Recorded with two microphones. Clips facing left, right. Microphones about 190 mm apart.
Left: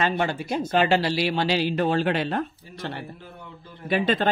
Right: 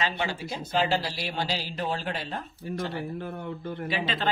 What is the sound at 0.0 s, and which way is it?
A man's voice, 55° left (ahead or behind).